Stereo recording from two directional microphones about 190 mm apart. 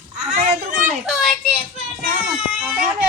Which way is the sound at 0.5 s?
40° right (ahead or behind).